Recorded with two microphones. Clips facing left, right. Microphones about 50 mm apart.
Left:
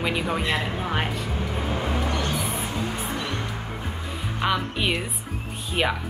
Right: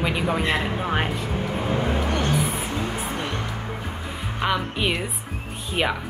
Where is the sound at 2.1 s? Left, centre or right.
Right.